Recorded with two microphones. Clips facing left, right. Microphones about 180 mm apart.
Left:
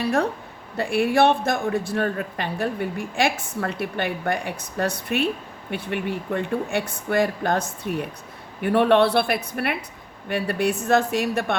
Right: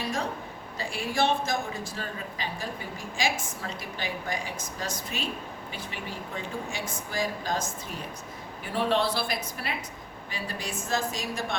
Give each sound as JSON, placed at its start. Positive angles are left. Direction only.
{"t": 0.0, "sound": "speech", "side_deg": 60}